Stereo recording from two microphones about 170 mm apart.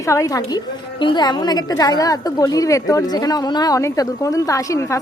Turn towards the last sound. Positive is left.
turn(degrees=20)  # may be behind; listen again after turning